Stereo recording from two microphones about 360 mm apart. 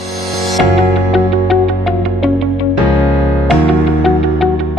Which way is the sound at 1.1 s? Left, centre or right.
Centre.